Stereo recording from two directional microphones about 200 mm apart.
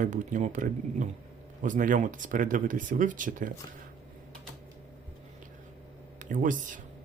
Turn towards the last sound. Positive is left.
turn(degrees=-40)  # may be behind; listen again after turning